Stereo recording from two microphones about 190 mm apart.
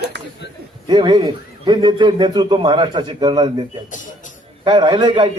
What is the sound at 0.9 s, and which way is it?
A man's voice, 25° right (ahead or behind).